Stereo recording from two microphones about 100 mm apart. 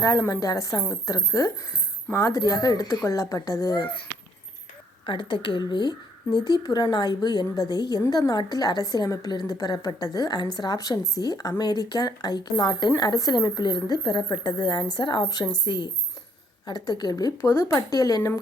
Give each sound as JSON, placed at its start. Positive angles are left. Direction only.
{"t": 0.0, "sound": "a woman's voice", "side_deg": 35}
{"t": 5.0, "sound": "a woman's voice", "side_deg": 55}
{"t": 17.3, "sound": "a woman's voice", "side_deg": 25}